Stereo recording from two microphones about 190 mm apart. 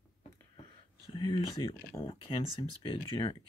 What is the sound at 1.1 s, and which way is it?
Speech, 25° left (ahead or behind).